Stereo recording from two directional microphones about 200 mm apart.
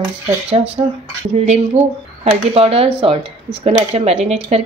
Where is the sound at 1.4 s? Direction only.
30° right (ahead or behind).